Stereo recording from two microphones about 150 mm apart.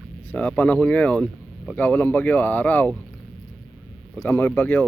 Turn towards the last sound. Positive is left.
turn(degrees=10)  # may be behind; listen again after turning